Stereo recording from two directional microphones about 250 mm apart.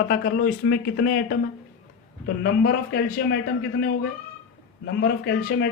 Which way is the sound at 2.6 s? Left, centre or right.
Left.